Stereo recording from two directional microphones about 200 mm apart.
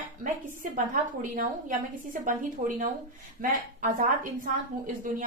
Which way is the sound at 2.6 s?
35° right (ahead or behind).